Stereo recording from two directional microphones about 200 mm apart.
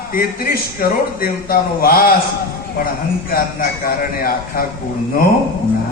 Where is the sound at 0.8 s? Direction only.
45° left (ahead or behind).